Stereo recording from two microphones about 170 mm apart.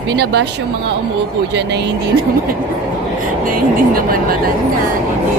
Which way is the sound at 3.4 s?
55° right (ahead or behind).